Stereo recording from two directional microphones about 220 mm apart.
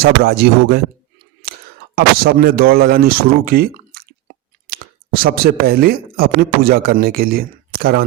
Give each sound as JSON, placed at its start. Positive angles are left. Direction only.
{"t": 0.0, "sound": "a man's voice", "side_deg": -45}
{"t": 2.0, "sound": "a man's voice", "side_deg": -40}